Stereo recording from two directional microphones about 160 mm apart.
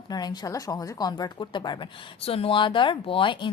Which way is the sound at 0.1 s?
25° left (ahead or behind).